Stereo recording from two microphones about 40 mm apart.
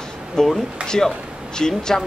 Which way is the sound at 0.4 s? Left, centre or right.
Centre.